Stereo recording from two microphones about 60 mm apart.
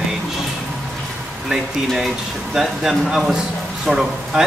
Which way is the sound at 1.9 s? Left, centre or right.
Centre.